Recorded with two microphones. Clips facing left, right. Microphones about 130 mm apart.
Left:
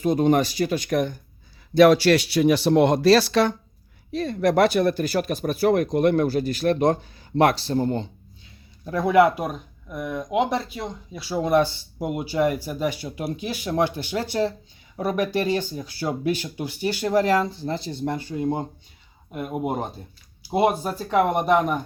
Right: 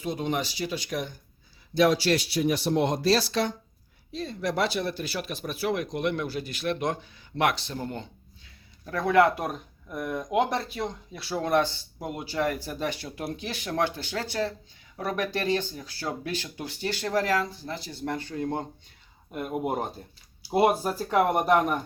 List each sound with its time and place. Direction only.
0.0 s speech: 50° left (ahead or behind)
1.7 s speech: 65° left (ahead or behind); by 8.0 s 35° left (ahead or behind)
8.8 s speech: 15° left (ahead or behind); by 21.8 s centre (ahead or behind)